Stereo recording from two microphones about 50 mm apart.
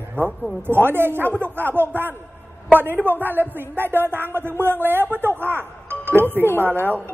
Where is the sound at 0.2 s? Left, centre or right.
Right.